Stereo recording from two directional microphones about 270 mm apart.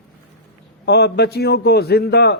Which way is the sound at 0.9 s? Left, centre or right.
Left.